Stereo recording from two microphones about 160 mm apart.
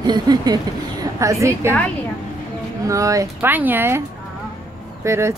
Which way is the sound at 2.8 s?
20° right (ahead or behind).